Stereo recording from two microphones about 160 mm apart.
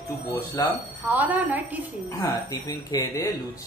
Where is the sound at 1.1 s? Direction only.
10° right (ahead or behind).